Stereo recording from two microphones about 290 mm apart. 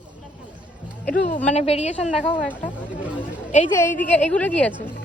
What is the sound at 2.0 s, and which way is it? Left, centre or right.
Speech, centre.